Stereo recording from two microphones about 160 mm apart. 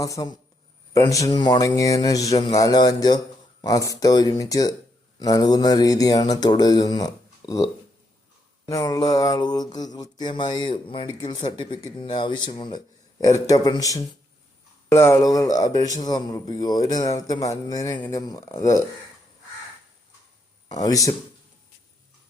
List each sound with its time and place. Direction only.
0.0 s a man's voice: 20° left (ahead or behind)
20.7 s a man's voice: 25° left (ahead or behind)